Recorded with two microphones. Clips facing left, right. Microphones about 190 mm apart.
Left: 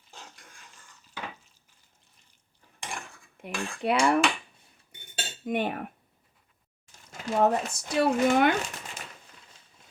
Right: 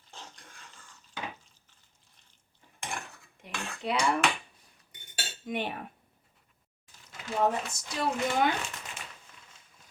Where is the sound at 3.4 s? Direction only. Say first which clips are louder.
Left 5 dB; 60° left (ahead or behind).